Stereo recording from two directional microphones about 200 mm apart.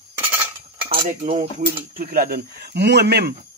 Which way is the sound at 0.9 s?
40° right (ahead or behind).